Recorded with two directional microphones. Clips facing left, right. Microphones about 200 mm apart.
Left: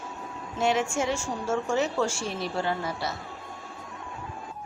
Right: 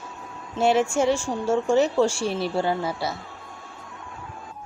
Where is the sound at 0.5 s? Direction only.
35° right (ahead or behind).